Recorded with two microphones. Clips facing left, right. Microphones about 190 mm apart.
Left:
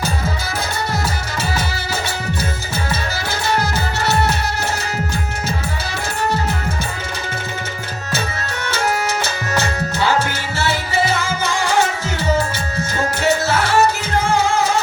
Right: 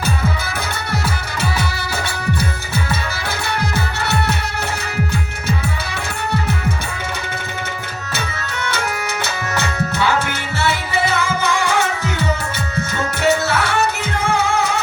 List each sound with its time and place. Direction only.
4.0 s music: 60° right (ahead or behind)
10.6 s music: 60° right (ahead or behind)
13.2 s music: 60° right (ahead or behind)